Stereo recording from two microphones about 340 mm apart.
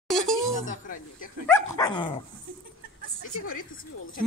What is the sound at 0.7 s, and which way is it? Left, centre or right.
Speech, left.